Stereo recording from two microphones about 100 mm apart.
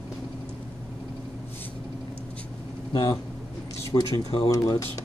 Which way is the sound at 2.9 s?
55° left (ahead or behind).